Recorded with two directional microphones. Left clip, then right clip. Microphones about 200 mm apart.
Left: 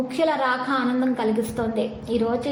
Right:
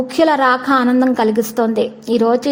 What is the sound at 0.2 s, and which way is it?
A woman's voice, 45° right (ahead or behind).